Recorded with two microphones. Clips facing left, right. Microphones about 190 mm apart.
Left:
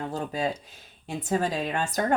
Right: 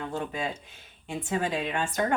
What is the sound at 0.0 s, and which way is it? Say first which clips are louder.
Speech: left 3 dB; 35° left (ahead or behind).